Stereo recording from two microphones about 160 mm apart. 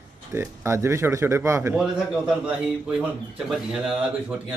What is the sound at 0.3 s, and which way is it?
Speech, 15° right (ahead or behind).